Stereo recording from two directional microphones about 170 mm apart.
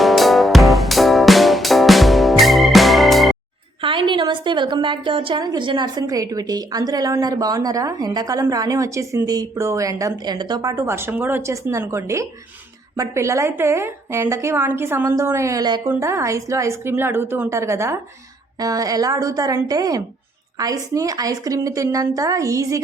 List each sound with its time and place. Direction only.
0.0 s music: centre (ahead or behind)
3.8 s a woman's voice: 30° right (ahead or behind)